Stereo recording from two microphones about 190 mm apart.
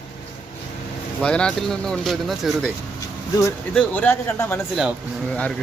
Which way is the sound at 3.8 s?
10° left (ahead or behind).